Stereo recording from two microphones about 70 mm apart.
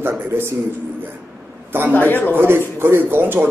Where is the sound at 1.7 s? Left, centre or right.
Right.